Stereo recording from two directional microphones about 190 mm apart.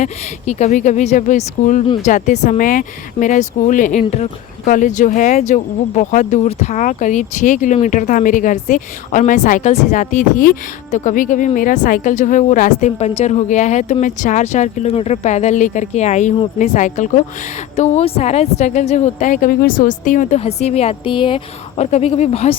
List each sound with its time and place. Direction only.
0.0 s speech: 35° left (ahead or behind)